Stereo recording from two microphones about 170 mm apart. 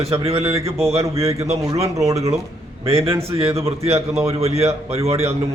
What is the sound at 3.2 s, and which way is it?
A man's voice, 35° right (ahead or behind).